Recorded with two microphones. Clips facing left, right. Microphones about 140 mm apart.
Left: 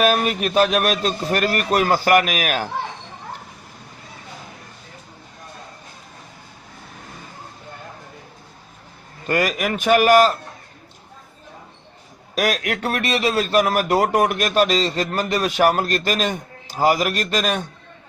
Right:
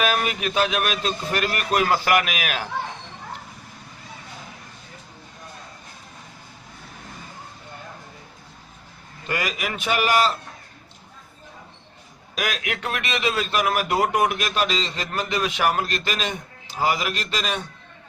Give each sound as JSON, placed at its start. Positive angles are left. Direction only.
{"t": 0.0, "sound": "a man's voice", "side_deg": 40}
{"t": 9.2, "sound": "a man's voice", "side_deg": 50}
{"t": 12.3, "sound": "a man's voice", "side_deg": 45}